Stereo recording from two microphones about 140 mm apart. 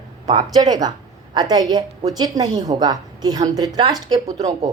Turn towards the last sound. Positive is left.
turn(degrees=-30)  # may be behind; listen again after turning